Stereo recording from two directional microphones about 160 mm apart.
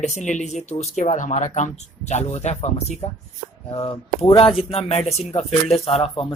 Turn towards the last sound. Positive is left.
turn(degrees=35)  # may be behind; listen again after turning